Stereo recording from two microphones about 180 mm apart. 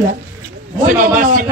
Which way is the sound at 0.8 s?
50° right (ahead or behind).